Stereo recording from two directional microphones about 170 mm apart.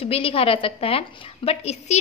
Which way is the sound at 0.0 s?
35° left (ahead or behind).